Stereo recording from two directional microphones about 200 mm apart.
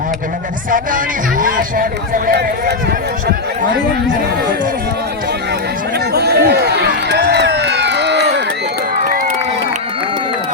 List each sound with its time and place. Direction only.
0.7 s speech: 40° right (ahead or behind)
6.1 s run: 55° right (ahead or behind)